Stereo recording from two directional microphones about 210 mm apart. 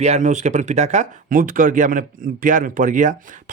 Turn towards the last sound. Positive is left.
turn(degrees=-35)  # may be behind; listen again after turning